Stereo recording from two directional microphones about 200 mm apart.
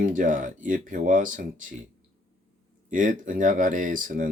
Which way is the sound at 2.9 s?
40° right (ahead or behind).